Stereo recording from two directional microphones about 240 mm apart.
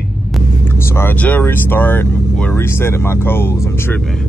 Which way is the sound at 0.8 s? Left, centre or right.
Centre.